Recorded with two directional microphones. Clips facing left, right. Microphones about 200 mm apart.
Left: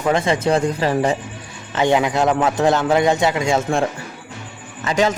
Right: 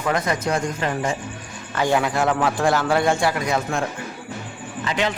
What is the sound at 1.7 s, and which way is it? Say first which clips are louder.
A man's voice: left 4 dB; 20° left (ahead or behind).